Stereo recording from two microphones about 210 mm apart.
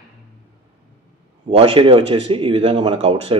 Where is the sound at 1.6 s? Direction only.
25° right (ahead or behind).